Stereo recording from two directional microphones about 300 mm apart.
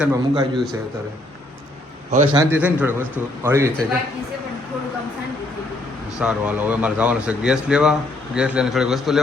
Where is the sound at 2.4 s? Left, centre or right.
Centre.